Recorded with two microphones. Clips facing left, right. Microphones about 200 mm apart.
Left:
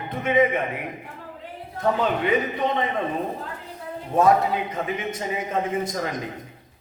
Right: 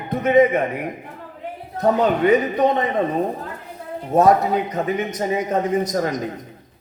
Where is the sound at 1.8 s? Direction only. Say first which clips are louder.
Right 6 dB; 40° right (ahead or behind).